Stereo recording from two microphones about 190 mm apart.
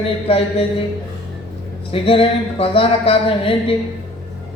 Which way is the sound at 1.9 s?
30° left (ahead or behind).